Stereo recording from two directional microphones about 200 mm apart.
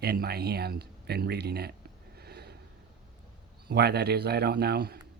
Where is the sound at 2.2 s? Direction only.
55° right (ahead or behind).